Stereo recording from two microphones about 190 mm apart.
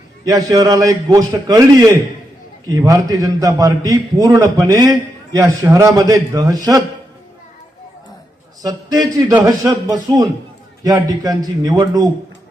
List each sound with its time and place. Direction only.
0.3 s a man's voice: 20° right (ahead or behind)
8.6 s a man's voice: 20° right (ahead or behind)